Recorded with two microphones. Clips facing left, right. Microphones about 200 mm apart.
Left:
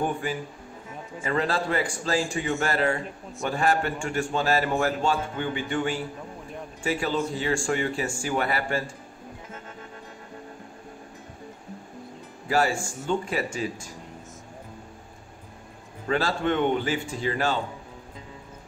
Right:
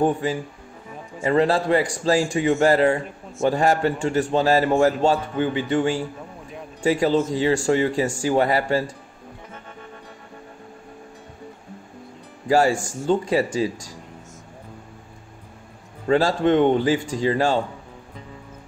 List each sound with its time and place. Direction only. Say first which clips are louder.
0.0 s a man's voice: right 7 dB; 30° right (ahead or behind)
12.4 s a man's voice: right 6 dB; 35° right (ahead or behind)
16.1 s a man's voice: right 7 dB; 35° right (ahead or behind)